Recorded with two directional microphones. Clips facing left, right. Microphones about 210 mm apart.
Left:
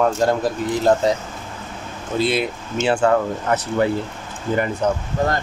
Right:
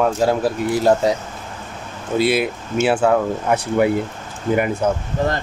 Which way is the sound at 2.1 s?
10° right (ahead or behind).